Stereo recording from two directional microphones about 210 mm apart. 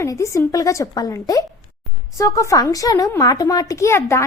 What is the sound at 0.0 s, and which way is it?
A woman's voice, 15° left (ahead or behind).